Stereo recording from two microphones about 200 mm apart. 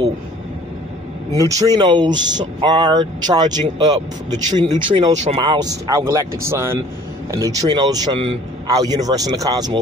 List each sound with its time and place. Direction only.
1.3 s a man's voice: 20° right (ahead or behind)
5.1 s speech: 35° right (ahead or behind)
5.4 s a man's voice: 20° right (ahead or behind)